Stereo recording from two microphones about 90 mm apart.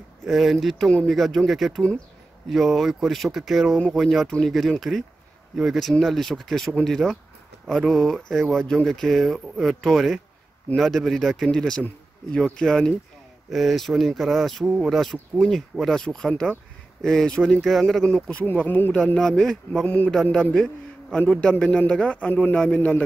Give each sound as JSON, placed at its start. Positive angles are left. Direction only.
{"t": 0.2, "sound": "a man's voice", "side_deg": 0}
{"t": 15.0, "sound": "speech", "side_deg": 0}
{"t": 18.4, "sound": "speech", "side_deg": 20}
{"t": 19.1, "sound": "a man's voice", "side_deg": 5}